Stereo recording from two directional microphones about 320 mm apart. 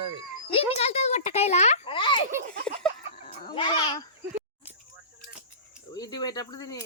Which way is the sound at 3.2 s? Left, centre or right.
Centre.